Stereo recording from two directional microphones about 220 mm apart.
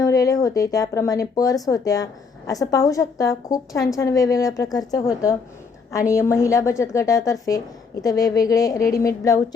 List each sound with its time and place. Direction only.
0.0 s a woman's voice: 15° left (ahead or behind)